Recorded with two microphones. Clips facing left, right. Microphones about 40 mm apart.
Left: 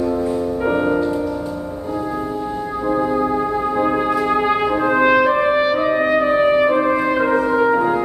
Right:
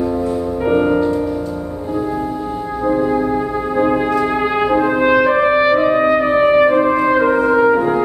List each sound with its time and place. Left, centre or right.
0.7 s music: centre
2.9 s music: centre
7.7 s brass instrument: centre